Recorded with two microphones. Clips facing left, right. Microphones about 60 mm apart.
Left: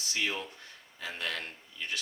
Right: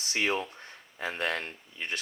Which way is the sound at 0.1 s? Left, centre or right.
Right.